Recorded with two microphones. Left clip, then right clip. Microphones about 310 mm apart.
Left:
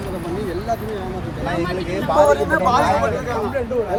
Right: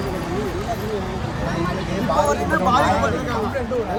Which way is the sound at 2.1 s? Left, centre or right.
Left.